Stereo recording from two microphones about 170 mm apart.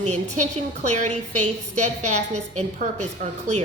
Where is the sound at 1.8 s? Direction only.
40° right (ahead or behind).